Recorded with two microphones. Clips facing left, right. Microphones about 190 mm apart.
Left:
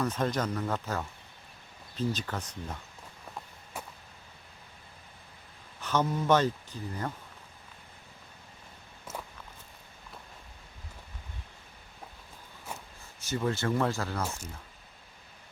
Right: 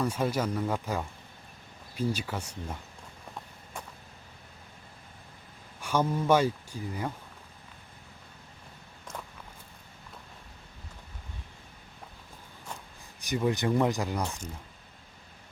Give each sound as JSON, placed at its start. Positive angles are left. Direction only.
{"t": 0.0, "sound": "speech", "side_deg": -10}
{"t": 5.8, "sound": "speech", "side_deg": -10}
{"t": 9.1, "sound": "walk", "side_deg": 5}
{"t": 13.1, "sound": "speech", "side_deg": -15}